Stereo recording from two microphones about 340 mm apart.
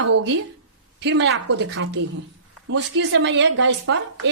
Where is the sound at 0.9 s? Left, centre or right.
Right.